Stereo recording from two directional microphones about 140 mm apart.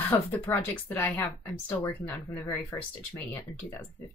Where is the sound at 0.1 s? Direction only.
15° left (ahead or behind).